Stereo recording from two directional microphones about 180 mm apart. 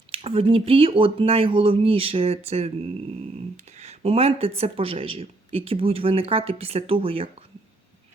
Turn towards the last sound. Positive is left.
turn(degrees=-30)  # may be behind; listen again after turning